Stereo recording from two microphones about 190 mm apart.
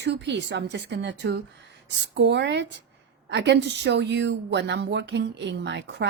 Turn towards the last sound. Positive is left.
turn(degrees=-65)  # may be behind; listen again after turning